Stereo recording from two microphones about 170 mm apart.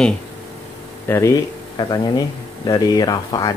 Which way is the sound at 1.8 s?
25° left (ahead or behind).